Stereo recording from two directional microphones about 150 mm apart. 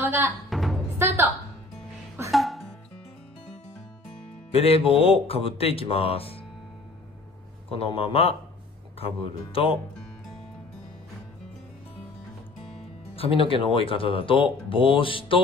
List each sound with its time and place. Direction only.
0.5 s music: centre (ahead or behind)
0.9 s music: 15° right (ahead or behind)
2.3 s music: centre (ahead or behind)
4.5 s speech: 40° left (ahead or behind)
7.8 s speech: 40° left (ahead or behind)
13.1 s speech: 40° left (ahead or behind)